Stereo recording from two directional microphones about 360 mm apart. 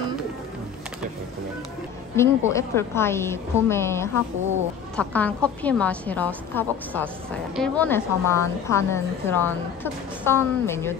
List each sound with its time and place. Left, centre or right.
2.1 s a woman's voice: centre